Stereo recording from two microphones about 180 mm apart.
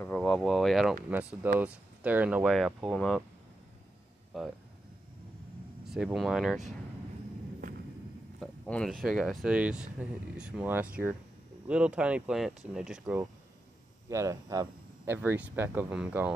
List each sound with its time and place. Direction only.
0.0 s speech: 5° left (ahead or behind)
4.3 s speech: centre (ahead or behind)
5.9 s speech: 5° right (ahead or behind)
8.4 s speech: 5° left (ahead or behind)